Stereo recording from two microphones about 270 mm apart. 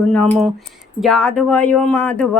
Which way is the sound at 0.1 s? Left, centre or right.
Centre.